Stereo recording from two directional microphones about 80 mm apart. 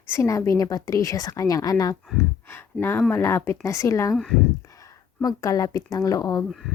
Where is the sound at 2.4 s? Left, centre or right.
Left.